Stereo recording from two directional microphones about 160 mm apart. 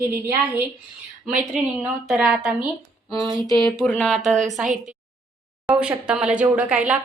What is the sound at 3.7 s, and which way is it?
Speech, 5° left (ahead or behind).